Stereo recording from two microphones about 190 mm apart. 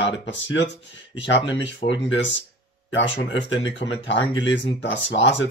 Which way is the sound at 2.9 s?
75° left (ahead or behind).